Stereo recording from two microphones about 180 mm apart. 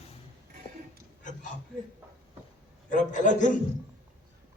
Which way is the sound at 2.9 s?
45° left (ahead or behind).